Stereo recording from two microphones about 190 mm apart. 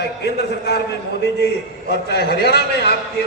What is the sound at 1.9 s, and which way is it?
A man's voice, 60° left (ahead or behind).